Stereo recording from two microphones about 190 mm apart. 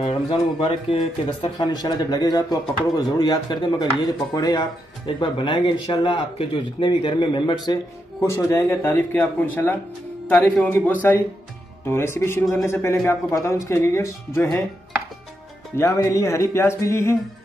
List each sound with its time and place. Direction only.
0.0 s speech: 25° left (ahead or behind)
15.7 s speech: 15° left (ahead or behind)